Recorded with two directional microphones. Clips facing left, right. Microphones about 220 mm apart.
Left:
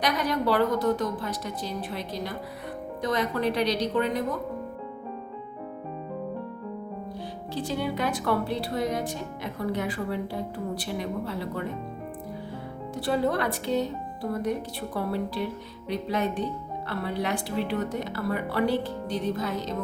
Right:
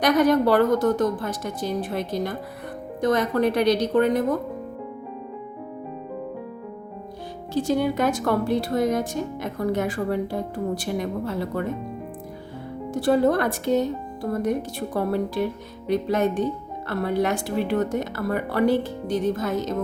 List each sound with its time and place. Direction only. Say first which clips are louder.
0.0 s a woman's voice: right 8 dB; 50° right (ahead or behind)
7.5 s a woman's voice: right 8 dB; 45° right (ahead or behind)
12.9 s a woman's voice: right 6 dB; 45° right (ahead or behind)